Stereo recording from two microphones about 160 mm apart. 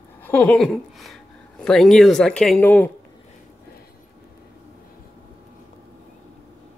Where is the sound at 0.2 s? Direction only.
10° left (ahead or behind).